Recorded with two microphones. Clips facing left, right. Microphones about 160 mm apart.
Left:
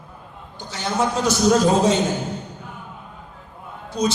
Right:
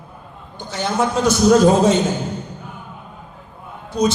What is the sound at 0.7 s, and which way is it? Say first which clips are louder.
A man's voice: right 3 dB; 55° right (ahead or behind).